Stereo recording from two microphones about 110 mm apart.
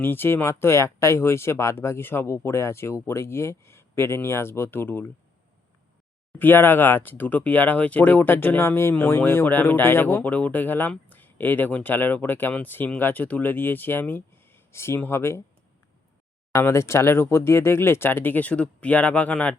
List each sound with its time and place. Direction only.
0.0 s speech: 20° left (ahead or behind)
6.4 s speech: 20° left (ahead or behind)
16.5 s speech: 25° left (ahead or behind)